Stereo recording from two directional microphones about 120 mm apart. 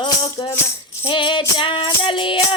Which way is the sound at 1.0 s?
45° left (ahead or behind).